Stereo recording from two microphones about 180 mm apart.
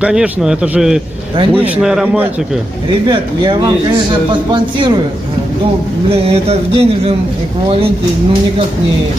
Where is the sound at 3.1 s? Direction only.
25° right (ahead or behind).